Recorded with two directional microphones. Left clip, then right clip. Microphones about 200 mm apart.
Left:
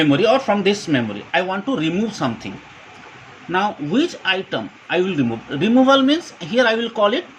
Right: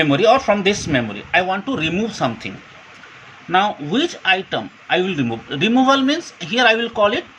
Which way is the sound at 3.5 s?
20° right (ahead or behind).